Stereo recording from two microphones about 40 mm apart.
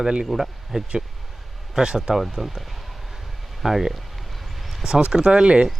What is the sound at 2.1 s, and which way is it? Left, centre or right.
Speech, centre.